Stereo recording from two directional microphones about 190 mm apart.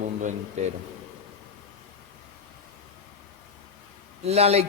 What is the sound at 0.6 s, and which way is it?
Speech, 35° right (ahead or behind).